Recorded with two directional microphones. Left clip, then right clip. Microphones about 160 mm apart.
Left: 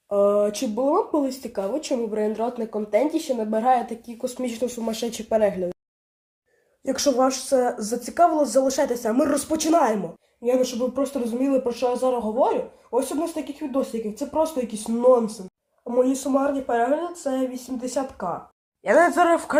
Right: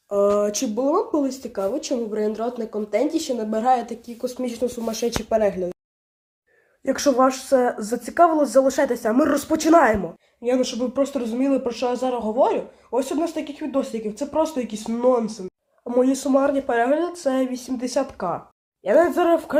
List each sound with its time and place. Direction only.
0.4 s speech: 20° right (ahead or behind)
6.8 s speech: 20° right (ahead or behind)
10.4 s speech: 40° right (ahead or behind)
15.8 s speech: 50° right (ahead or behind)
18.9 s speech: 25° right (ahead or behind)